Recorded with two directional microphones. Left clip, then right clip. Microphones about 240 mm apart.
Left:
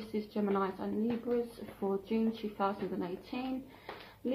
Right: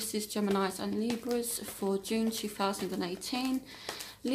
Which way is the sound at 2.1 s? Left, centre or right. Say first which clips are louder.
Right 2 dB; right.